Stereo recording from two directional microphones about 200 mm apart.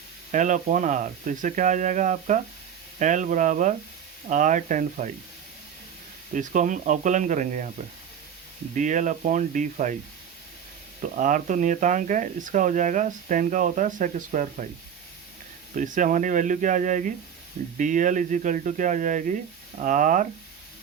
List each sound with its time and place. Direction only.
0.3 s speech: 40° right (ahead or behind)
6.3 s speech: 40° right (ahead or behind)
8.7 s speech: 40° right (ahead or behind)
11.0 s speech: 40° right (ahead or behind)
15.7 s speech: 40° right (ahead or behind)